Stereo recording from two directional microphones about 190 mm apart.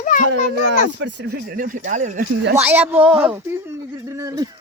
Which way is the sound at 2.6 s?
10° right (ahead or behind).